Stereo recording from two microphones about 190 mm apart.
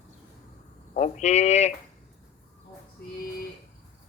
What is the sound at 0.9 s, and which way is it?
Speech, 40° left (ahead or behind).